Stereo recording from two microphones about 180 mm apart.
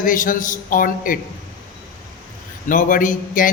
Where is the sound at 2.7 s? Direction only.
50° left (ahead or behind).